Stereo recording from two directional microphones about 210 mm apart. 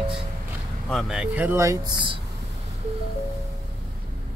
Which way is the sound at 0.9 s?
5° right (ahead or behind).